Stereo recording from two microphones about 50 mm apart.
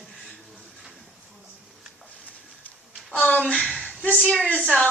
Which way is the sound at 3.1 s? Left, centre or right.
Left.